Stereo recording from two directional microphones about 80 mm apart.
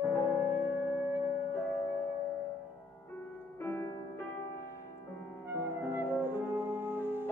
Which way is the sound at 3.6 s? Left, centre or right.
Left.